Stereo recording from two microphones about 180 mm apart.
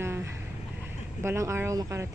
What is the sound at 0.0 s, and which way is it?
Vehicle, 15° right (ahead or behind).